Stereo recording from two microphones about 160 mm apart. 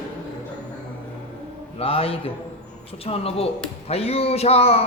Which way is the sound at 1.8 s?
35° left (ahead or behind).